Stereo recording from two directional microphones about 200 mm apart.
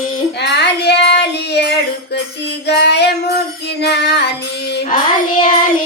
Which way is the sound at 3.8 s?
55° left (ahead or behind).